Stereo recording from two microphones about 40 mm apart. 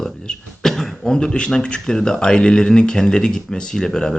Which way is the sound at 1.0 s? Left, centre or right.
Centre.